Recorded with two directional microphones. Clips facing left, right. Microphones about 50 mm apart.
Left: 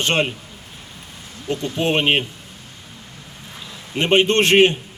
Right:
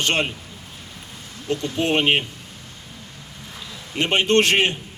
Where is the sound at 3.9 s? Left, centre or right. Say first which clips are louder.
Left 2 dB; left.